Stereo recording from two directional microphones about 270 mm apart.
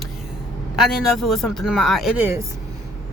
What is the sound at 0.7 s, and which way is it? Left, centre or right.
Speech, centre.